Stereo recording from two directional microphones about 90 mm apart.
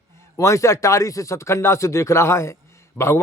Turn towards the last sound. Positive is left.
turn(degrees=30)  # may be behind; listen again after turning